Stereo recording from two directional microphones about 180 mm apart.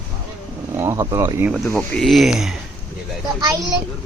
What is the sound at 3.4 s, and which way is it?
Speech, 20° right (ahead or behind).